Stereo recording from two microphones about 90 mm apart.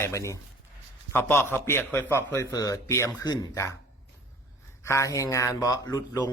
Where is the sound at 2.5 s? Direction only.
40° left (ahead or behind).